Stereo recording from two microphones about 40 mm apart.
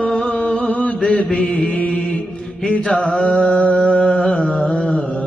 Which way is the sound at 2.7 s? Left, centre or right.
Left.